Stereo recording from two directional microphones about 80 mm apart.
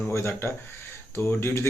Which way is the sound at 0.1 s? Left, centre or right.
Left.